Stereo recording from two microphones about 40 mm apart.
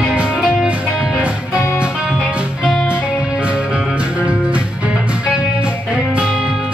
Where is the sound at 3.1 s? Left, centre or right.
Centre.